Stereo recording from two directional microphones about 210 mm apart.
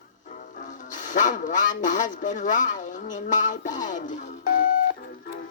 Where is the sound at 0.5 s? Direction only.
35° left (ahead or behind).